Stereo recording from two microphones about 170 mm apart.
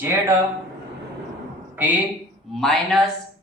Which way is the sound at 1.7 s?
10° right (ahead or behind).